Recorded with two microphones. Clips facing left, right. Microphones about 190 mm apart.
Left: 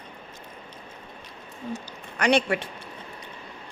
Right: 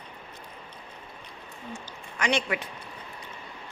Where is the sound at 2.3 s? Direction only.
30° left (ahead or behind).